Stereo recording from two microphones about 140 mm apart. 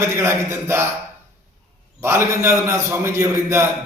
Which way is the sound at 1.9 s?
20° right (ahead or behind).